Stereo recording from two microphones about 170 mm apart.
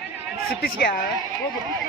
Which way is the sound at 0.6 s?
60° left (ahead or behind).